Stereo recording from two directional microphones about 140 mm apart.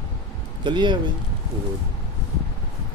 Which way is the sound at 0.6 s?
35° right (ahead or behind).